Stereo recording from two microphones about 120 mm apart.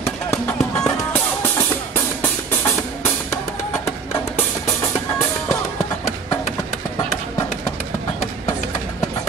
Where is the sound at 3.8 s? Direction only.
25° left (ahead or behind).